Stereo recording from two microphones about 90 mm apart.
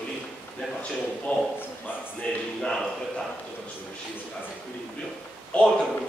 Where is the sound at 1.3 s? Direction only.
15° left (ahead or behind).